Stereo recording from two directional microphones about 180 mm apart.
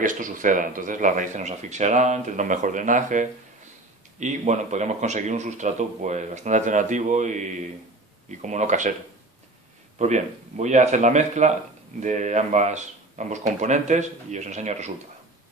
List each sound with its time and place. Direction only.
0.0 s speech: 45° right (ahead or behind)
9.9 s speech: 40° right (ahead or behind)